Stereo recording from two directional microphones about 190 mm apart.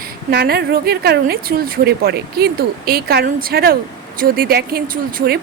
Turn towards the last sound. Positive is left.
turn(degrees=-50)  # may be behind; listen again after turning